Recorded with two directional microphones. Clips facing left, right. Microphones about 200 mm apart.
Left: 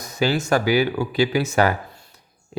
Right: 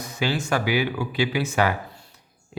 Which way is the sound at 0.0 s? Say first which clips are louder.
Left 4 dB; 40° left (ahead or behind).